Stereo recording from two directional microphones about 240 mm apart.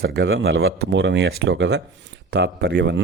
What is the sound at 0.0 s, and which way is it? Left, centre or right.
Speech, right.